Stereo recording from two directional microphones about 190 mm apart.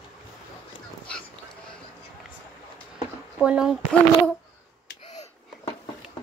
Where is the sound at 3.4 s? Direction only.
5° right (ahead or behind).